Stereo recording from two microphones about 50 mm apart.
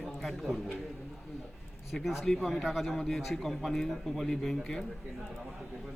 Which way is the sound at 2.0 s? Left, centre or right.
Centre.